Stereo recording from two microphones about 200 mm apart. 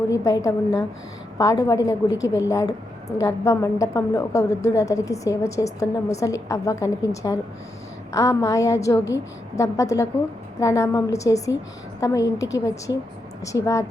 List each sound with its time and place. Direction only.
0.1 s a woman's voice: 15° left (ahead or behind)